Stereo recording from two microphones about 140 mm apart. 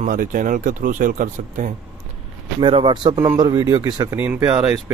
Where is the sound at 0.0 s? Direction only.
75° right (ahead or behind).